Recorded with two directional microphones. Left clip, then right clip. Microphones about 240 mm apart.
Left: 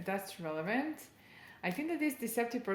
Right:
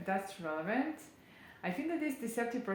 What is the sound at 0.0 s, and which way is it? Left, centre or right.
Speech, left.